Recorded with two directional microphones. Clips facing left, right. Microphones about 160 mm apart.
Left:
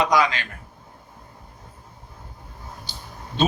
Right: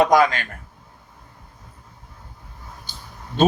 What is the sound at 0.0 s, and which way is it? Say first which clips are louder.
Speech: right 4 dB; 50° right (ahead or behind).